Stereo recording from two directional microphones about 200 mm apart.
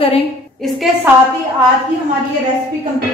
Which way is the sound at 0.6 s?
Centre (ahead or behind).